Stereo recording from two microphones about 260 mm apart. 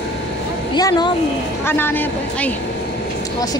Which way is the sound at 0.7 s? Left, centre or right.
Centre.